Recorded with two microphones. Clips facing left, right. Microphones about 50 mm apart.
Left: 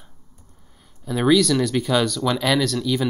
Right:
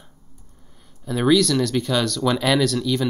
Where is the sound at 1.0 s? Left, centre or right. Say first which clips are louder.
Even; centre.